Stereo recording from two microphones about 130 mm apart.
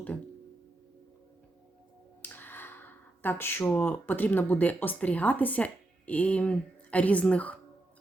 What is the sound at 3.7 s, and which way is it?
Speech, 10° left (ahead or behind).